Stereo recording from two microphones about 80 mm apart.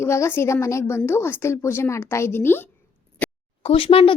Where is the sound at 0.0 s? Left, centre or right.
Left.